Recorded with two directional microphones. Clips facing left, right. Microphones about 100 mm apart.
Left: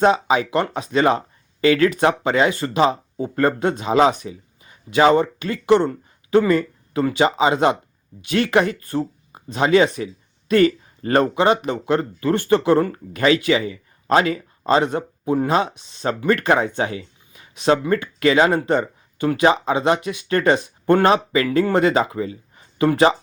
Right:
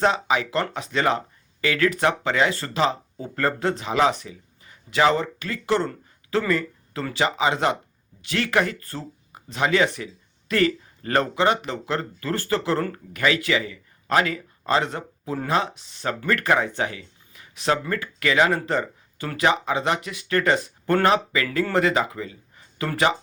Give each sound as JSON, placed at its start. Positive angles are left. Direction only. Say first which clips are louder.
{"t": 0.0, "sound": "speech", "louder": "left 5 dB", "side_deg": 20}